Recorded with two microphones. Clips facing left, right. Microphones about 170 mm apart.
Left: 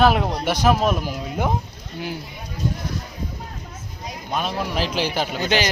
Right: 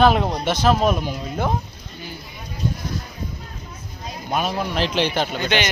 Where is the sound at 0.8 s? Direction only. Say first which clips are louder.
Right 1 dB; 5° left (ahead or behind).